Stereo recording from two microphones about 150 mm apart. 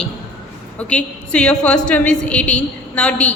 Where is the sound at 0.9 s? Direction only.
5° left (ahead or behind).